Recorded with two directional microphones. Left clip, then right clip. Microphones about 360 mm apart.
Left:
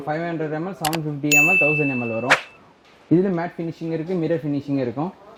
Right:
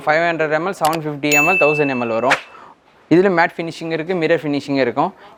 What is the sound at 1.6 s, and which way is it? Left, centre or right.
Speech, right.